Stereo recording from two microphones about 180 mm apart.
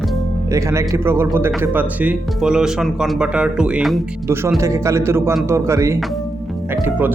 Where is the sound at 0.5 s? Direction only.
15° right (ahead or behind).